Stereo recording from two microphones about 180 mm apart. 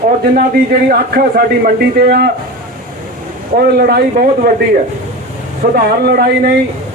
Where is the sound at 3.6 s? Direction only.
60° right (ahead or behind).